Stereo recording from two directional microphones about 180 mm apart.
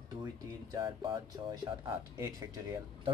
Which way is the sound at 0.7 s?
25° right (ahead or behind).